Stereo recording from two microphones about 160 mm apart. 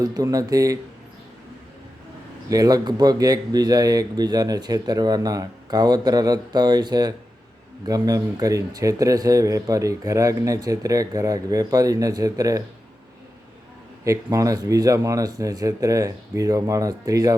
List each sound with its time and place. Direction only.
0.0 s speech: 20° right (ahead or behind)
2.5 s speech: 25° right (ahead or behind)
14.0 s speech: 20° right (ahead or behind)